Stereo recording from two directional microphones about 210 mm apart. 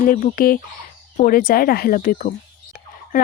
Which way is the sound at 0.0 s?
40° left (ahead or behind).